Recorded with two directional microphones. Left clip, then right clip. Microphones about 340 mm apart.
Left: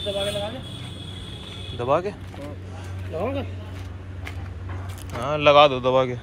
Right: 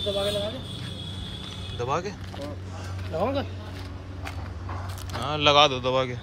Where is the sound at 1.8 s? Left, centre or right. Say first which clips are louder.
Left 6 dB; centre.